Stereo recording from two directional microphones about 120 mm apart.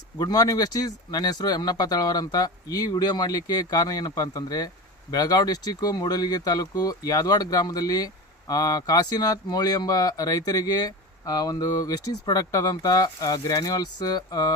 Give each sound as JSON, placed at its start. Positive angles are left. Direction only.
{"t": 0.2, "sound": "speech", "side_deg": 30}